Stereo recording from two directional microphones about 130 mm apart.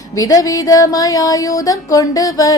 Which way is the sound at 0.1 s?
25° left (ahead or behind).